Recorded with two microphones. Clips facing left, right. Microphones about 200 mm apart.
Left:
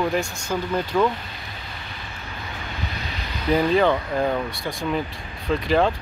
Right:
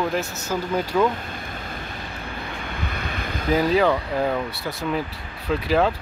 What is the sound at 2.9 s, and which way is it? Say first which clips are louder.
Vehicle: right 3 dB; 55° right (ahead or behind).